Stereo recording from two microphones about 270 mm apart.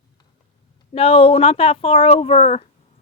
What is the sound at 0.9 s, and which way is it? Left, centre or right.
Speech, left.